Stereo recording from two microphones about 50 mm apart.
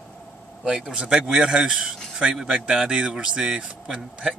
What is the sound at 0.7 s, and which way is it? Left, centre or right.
Speech, centre.